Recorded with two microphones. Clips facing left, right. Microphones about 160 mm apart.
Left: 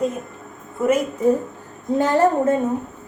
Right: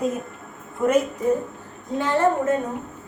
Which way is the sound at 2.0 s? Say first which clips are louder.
Left 4 dB; 40° left (ahead or behind).